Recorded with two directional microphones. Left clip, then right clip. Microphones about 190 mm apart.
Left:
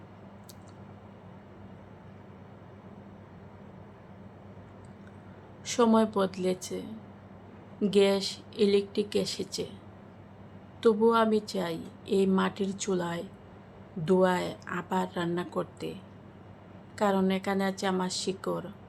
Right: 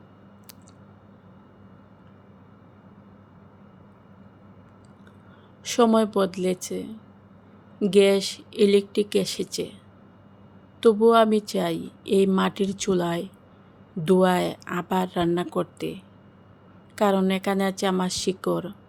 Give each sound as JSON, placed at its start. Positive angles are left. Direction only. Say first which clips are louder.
{"t": 5.6, "sound": "speech", "louder": "right 5 dB", "side_deg": -40}
{"t": 10.8, "sound": "speech", "louder": "right 6 dB", "side_deg": -40}